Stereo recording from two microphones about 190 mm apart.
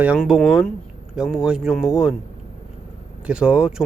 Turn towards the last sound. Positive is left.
turn(degrees=-5)  # may be behind; listen again after turning